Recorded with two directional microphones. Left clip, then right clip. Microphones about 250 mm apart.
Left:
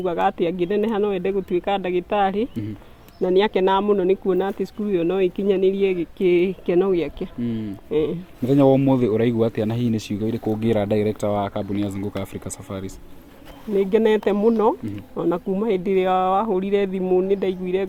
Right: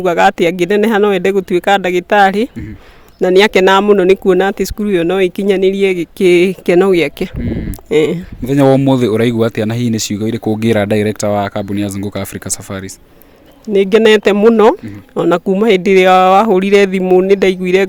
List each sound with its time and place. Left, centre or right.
0.0 s a man's voice: right